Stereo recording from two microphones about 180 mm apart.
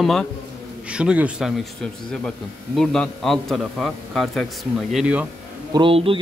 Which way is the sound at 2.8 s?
Centre (ahead or behind).